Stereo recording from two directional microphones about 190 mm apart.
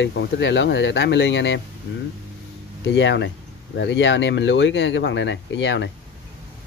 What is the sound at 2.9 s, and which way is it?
Speech, 70° left (ahead or behind).